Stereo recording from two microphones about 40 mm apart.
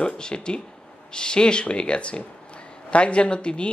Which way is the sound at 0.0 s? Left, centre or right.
Left.